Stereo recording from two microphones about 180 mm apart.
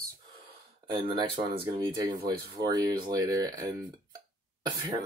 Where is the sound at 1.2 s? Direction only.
25° right (ahead or behind).